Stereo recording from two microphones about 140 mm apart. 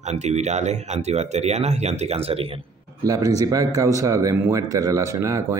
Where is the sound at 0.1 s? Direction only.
55° right (ahead or behind).